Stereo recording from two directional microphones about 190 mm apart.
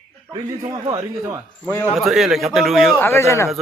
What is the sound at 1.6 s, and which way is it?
Speech, 10° left (ahead or behind).